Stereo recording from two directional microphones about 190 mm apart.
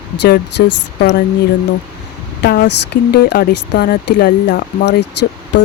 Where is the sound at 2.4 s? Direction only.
60° left (ahead or behind).